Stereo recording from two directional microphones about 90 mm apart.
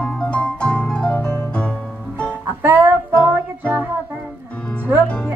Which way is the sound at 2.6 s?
20° right (ahead or behind).